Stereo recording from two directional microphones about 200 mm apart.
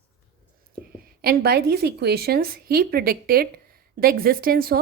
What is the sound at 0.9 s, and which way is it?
A woman's voice, 50° right (ahead or behind).